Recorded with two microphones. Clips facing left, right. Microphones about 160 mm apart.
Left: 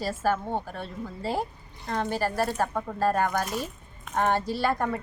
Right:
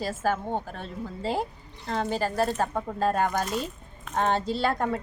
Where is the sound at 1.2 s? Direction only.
15° right (ahead or behind).